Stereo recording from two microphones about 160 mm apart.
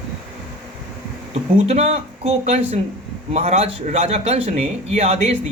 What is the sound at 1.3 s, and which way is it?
Speech, 40° right (ahead or behind).